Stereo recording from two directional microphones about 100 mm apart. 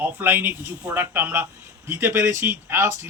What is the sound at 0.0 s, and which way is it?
A man's voice, 20° right (ahead or behind).